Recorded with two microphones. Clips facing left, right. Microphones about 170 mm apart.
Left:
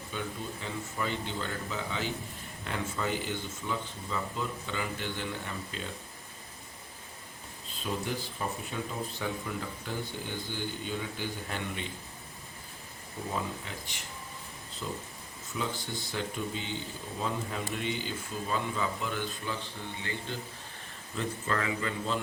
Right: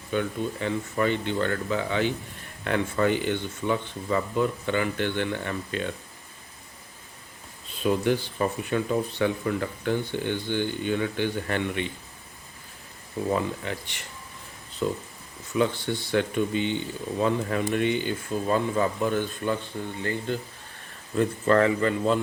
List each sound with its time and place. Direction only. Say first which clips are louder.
0.1 s speech: right 11 dB; 65° right (ahead or behind)
7.9 s speech: right 11 dB; 70° right (ahead or behind)
13.3 s speech: right 7 dB; 70° right (ahead or behind)